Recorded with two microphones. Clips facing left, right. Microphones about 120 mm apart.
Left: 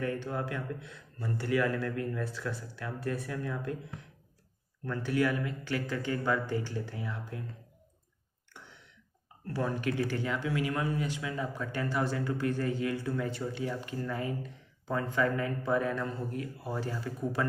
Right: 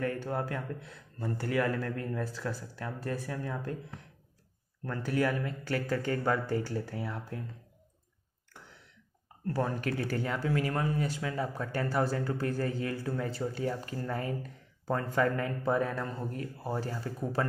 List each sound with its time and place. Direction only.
0.0 s speech: 40° right (ahead or behind)
9.5 s speech: 40° right (ahead or behind)